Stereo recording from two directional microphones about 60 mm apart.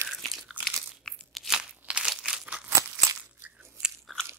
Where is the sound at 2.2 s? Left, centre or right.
Centre.